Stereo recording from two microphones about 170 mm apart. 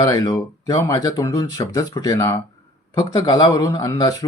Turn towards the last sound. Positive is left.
turn(degrees=20)  # may be behind; listen again after turning